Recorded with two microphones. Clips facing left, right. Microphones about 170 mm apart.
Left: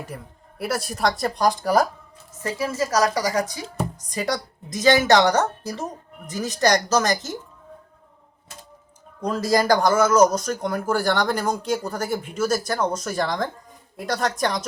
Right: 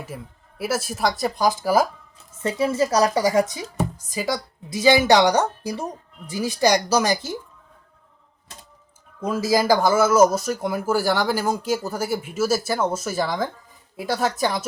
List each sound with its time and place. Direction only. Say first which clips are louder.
0.1 s speech: right 1 dB; centre (ahead or behind)
2.4 s a woman's voice: right 4 dB; 25° right (ahead or behind)
3.8 s speech: right 1 dB; 5° right (ahead or behind)
9.2 s speech: even; 5° right (ahead or behind)